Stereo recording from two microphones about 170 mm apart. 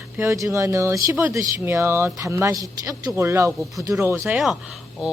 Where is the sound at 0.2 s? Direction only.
20° right (ahead or behind).